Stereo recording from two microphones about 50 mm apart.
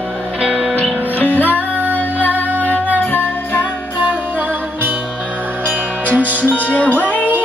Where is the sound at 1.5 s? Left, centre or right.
Right.